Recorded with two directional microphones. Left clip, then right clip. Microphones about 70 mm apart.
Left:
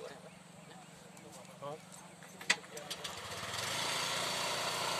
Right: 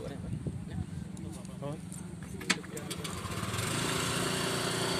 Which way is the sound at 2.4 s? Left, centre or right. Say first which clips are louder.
Right 1 dB; right.